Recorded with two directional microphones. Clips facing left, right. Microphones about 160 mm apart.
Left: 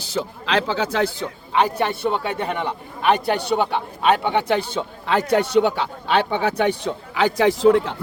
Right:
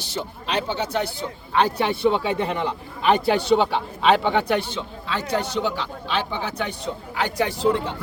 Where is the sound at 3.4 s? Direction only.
60° left (ahead or behind).